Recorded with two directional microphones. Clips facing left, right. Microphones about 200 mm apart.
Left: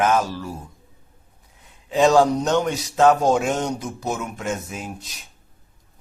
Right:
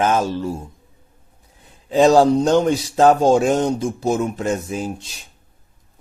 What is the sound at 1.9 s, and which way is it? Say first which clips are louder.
Speech: right 4 dB; 35° right (ahead or behind).